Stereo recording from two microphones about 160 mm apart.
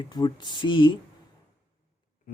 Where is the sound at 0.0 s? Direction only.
25° left (ahead or behind).